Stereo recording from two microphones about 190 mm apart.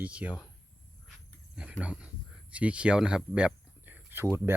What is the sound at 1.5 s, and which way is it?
Speech, 5° right (ahead or behind).